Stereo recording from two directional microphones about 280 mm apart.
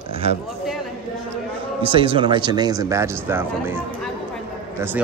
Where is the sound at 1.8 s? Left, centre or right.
Centre.